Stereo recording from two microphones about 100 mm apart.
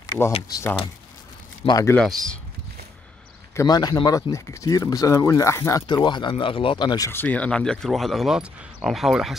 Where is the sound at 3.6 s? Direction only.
40° left (ahead or behind).